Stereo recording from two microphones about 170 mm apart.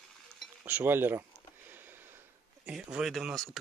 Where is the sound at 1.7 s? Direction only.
10° right (ahead or behind).